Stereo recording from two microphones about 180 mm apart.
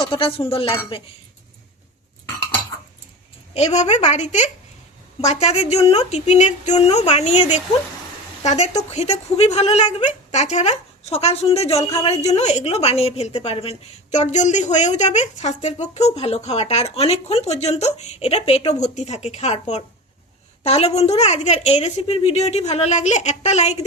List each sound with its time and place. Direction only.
0.0 s speech: 30° left (ahead or behind)
3.5 s speech: 35° left (ahead or behind)